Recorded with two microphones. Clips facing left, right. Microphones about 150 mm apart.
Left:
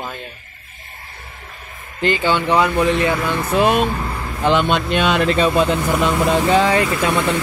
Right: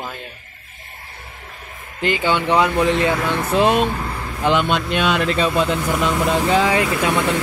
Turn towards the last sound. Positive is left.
turn(degrees=-10)  # may be behind; listen again after turning